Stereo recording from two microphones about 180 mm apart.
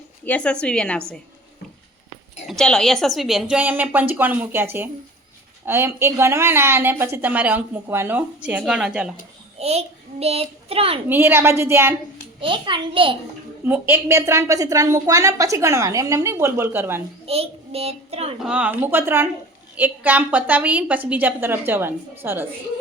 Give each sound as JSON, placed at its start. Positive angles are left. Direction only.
{"t": 0.3, "sound": "a woman's voice", "side_deg": 5}
{"t": 2.5, "sound": "a woman's voice", "side_deg": 5}
{"t": 9.6, "sound": "a child's voice", "side_deg": -35}
{"t": 11.1, "sound": "a woman's voice", "side_deg": -10}
{"t": 12.4, "sound": "a child's voice", "side_deg": -25}
{"t": 13.7, "sound": "a woman's voice", "side_deg": -10}
{"t": 17.2, "sound": "a child's voice", "side_deg": -35}
{"t": 18.4, "sound": "a woman's voice", "side_deg": -5}